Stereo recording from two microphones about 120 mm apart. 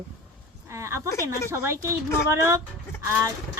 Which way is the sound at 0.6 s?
25° right (ahead or behind).